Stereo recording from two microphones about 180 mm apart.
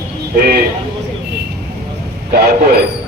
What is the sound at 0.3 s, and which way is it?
Speech, 60° right (ahead or behind).